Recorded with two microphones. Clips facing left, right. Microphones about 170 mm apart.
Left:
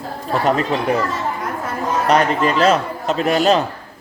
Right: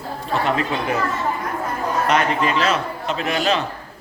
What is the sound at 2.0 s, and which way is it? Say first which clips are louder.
Speech: left 4 dB; 40° left (ahead or behind).